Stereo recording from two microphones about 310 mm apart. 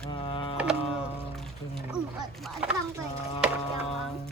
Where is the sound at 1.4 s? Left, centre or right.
Centre.